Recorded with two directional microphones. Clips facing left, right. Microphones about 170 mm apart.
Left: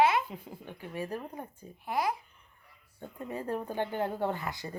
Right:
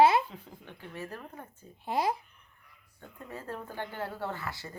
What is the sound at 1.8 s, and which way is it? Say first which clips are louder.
Speech: right 1 dB; 25° right (ahead or behind).